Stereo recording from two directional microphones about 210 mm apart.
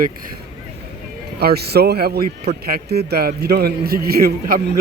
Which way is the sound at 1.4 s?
50° right (ahead or behind).